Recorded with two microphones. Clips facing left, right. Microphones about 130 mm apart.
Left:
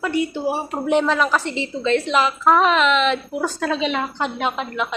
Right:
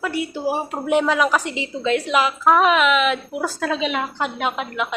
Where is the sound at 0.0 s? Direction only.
5° right (ahead or behind).